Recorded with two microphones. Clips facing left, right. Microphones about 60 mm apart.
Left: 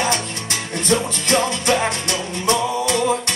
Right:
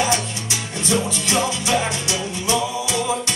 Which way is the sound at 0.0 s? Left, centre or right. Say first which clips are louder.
Even; left.